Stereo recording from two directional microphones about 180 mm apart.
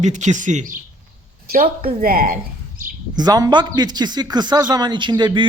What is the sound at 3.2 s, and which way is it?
A man's voice, 20° right (ahead or behind).